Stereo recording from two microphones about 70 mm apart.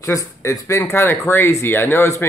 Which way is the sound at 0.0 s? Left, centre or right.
Left.